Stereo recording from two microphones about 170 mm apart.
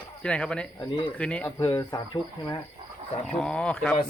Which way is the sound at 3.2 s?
5° left (ahead or behind).